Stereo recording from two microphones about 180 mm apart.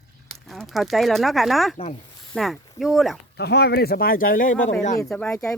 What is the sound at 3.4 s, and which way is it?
Speech, 60° left (ahead or behind).